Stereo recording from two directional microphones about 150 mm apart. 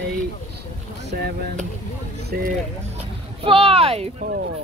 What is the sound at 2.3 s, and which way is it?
Music, 80° right.